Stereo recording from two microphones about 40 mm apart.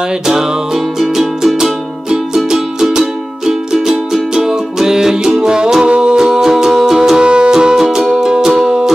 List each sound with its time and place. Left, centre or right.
0.3 s music: centre